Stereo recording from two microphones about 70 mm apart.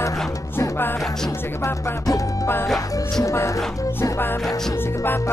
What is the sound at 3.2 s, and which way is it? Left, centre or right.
Speech, left.